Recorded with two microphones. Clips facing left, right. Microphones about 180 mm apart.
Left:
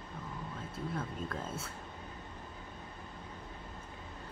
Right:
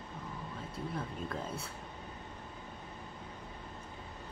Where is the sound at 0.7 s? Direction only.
Centre (ahead or behind).